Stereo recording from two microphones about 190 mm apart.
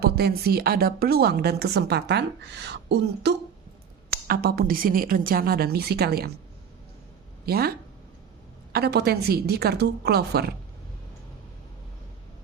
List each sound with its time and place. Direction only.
0.0 s a woman's voice: 55° right (ahead or behind)
4.1 s a woman's voice: 55° right (ahead or behind)
7.4 s speech: 55° right (ahead or behind)
8.7 s a woman's voice: 60° right (ahead or behind)